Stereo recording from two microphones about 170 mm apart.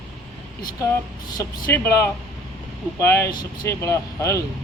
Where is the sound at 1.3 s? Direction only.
15° left (ahead or behind).